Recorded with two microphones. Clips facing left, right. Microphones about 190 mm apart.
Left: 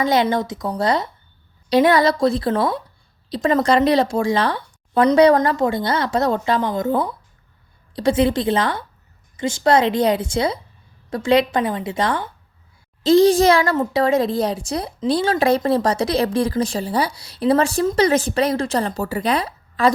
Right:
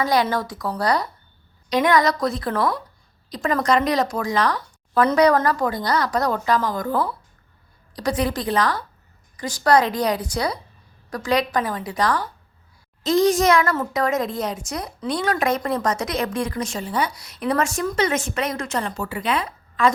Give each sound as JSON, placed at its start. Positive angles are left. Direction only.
{"t": 0.0, "sound": "a woman's voice", "side_deg": 25}